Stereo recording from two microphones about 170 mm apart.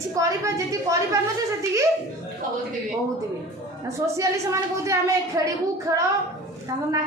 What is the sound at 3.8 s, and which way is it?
A woman's voice, 20° right (ahead or behind).